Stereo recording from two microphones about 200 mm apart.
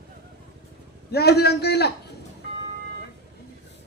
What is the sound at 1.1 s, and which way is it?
Speech, 55° left (ahead or behind).